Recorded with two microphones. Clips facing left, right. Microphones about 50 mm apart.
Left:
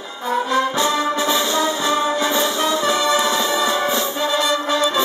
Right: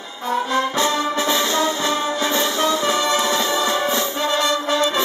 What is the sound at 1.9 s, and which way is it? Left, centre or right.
Music, left.